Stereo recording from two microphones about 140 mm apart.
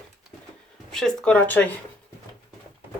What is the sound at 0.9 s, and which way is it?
Speech, 5° left (ahead or behind).